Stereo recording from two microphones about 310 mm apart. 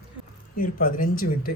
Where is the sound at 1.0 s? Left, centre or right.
Left.